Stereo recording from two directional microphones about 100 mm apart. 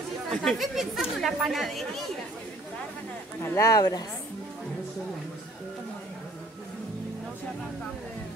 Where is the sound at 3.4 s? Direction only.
30° left (ahead or behind).